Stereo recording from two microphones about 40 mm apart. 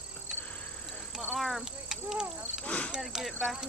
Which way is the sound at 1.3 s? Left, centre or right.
Centre.